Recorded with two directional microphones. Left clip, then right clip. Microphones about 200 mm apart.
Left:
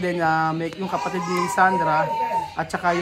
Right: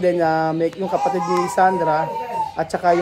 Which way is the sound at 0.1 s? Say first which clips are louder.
Right 3 dB; 20° left (ahead or behind).